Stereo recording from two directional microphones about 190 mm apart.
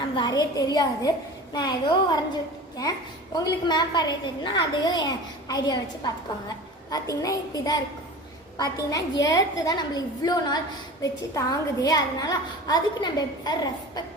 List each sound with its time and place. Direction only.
0.2 s a woman's voice: 20° left (ahead or behind)
3.3 s a woman's voice: 20° left (ahead or behind)
8.9 s a woman's voice: 20° left (ahead or behind)